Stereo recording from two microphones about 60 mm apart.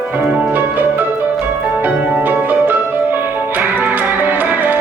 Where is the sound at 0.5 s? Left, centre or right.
Right.